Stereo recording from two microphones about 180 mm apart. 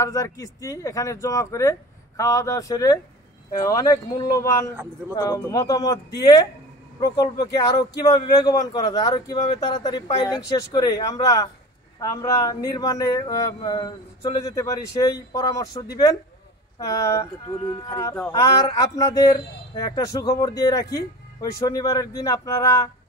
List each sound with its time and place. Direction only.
0.0 s a man's voice: 20° left (ahead or behind)